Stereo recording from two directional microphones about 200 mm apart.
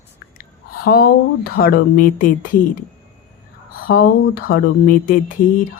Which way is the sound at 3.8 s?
50° left (ahead or behind).